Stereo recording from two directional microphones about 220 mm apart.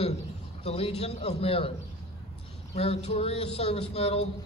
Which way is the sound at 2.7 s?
30° left (ahead or behind).